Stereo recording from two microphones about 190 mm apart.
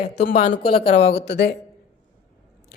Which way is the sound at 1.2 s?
60° left (ahead or behind).